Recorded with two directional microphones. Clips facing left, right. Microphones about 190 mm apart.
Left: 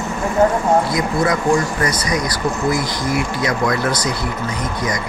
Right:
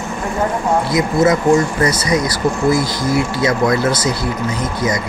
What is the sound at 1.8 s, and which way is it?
Speech, 25° right (ahead or behind).